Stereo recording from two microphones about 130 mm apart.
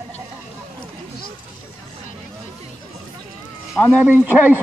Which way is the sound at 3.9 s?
15° right (ahead or behind).